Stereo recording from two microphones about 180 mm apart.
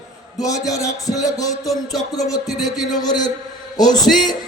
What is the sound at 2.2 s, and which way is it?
A man's voice, 20° left (ahead or behind).